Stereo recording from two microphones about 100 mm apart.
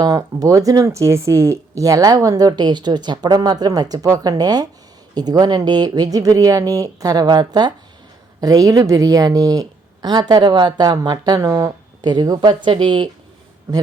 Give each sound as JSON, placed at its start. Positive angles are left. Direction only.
{"t": 0.0, "sound": "speech", "side_deg": -40}